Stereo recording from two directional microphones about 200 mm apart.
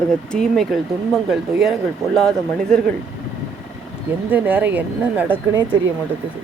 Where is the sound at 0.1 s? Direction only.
5° left (ahead or behind).